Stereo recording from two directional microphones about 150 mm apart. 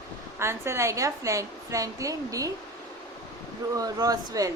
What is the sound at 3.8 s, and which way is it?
Speech, 25° right (ahead or behind).